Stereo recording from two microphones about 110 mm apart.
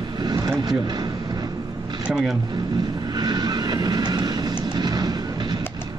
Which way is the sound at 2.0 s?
5° right (ahead or behind).